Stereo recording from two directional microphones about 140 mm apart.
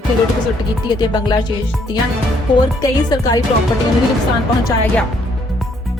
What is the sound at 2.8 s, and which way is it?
Speech, 25° left (ahead or behind).